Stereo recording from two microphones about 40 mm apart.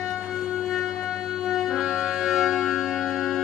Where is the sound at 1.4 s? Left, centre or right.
Centre.